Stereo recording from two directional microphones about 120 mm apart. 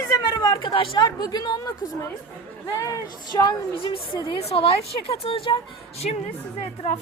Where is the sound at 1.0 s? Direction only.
35° left (ahead or behind).